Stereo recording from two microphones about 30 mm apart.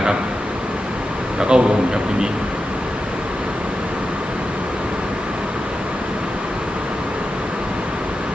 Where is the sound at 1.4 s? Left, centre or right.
Right.